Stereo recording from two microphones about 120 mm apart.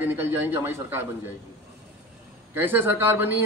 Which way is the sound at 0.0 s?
20° right (ahead or behind).